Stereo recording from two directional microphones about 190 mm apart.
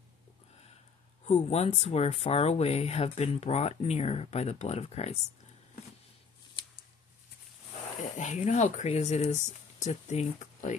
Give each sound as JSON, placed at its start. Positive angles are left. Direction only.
{"t": 1.2, "sound": "speech", "side_deg": 35}
{"t": 8.0, "sound": "speech", "side_deg": 40}